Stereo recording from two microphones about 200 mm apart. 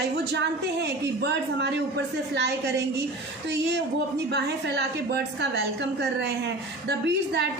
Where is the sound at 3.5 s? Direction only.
60° right (ahead or behind).